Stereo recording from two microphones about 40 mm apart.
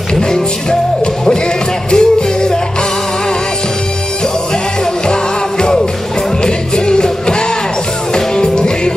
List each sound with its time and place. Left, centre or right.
0.1 s music: centre
1.9 s music: centre
5.6 s music: centre